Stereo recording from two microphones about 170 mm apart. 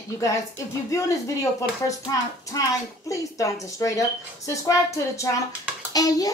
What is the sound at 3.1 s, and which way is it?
Speech, 20° left (ahead or behind).